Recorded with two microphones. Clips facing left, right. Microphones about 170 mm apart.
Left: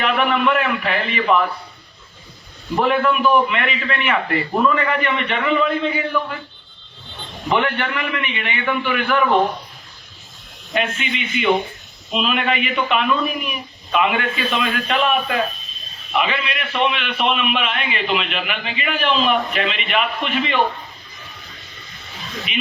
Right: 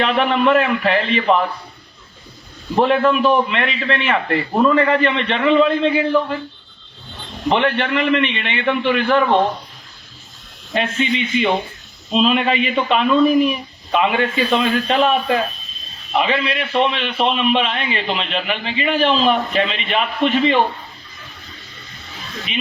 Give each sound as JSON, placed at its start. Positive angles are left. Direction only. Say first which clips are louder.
{"t": 0.0, "sound": "a man's voice", "louder": "right 2 dB", "side_deg": -30}
{"t": 2.7, "sound": "a man's voice", "louder": "right 3 dB", "side_deg": -30}
{"t": 7.6, "sound": "a man's voice", "louder": "right 5 dB", "side_deg": -30}
{"t": 10.8, "sound": "a man's voice", "louder": "right 4 dB", "side_deg": -30}